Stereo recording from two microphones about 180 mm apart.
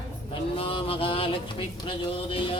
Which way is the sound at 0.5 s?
30° left (ahead or behind).